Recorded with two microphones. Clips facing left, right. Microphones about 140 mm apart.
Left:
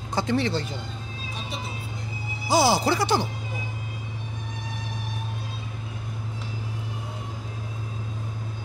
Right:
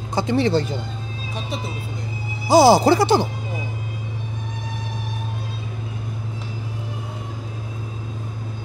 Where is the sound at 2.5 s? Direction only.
40° right (ahead or behind).